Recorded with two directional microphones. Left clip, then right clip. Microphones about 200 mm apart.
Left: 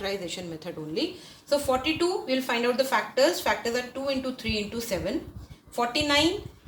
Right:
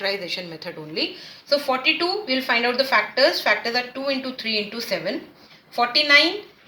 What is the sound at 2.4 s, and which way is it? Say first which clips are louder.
Speech: right 6 dB; 25° left (ahead or behind).